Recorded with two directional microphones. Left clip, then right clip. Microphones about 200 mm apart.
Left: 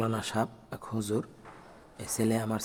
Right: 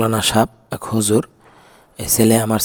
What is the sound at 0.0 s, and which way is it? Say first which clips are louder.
Speech: right 15 dB; 45° right (ahead or behind).